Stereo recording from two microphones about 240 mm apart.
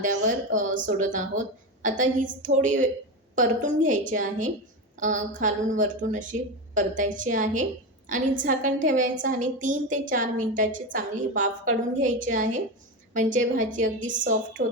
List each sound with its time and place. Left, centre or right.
0.0 s a woman's voice: right
14.0 s a woman's voice: centre